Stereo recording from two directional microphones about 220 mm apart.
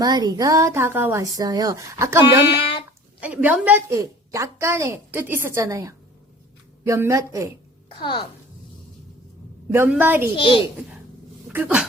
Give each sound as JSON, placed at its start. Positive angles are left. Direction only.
{"t": 0.0, "sound": "a woman's voice", "side_deg": -20}
{"t": 2.6, "sound": "a sound", "side_deg": 25}
{"t": 3.2, "sound": "a woman's voice", "side_deg": -5}
{"t": 7.9, "sound": "speech", "side_deg": 20}
{"t": 9.7, "sound": "a woman's voice", "side_deg": -10}
{"t": 10.3, "sound": "a child's voice", "side_deg": 20}
{"t": 11.4, "sound": "speech", "side_deg": -10}